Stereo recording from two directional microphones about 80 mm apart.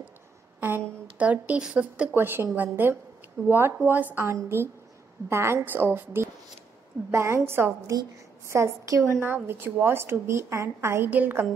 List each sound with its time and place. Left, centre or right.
0.6 s a woman's voice: right
2.1 s a woman's voice: right
4.2 s a woman's voice: right
11.1 s a woman's voice: right